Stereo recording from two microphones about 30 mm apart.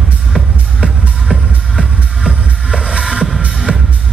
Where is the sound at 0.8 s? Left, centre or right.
Right.